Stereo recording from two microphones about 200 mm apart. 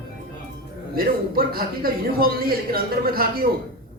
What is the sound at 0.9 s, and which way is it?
A man's voice, 50° right (ahead or behind).